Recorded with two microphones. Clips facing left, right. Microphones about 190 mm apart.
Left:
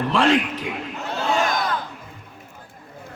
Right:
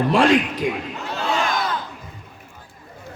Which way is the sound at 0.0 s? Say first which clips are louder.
Right 3 dB; 15° right (ahead or behind).